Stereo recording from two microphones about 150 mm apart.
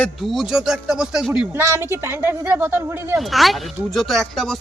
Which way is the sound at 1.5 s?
15° right (ahead or behind).